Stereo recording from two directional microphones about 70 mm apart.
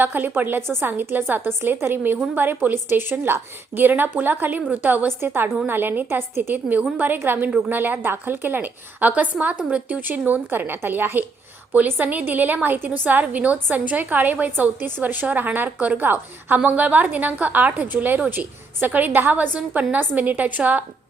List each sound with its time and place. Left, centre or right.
0.0 s a woman's voice: right